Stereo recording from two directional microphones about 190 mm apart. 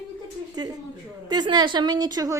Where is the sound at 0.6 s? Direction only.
20° right (ahead or behind).